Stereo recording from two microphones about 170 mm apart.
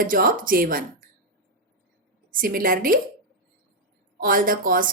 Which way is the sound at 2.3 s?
55° right (ahead or behind).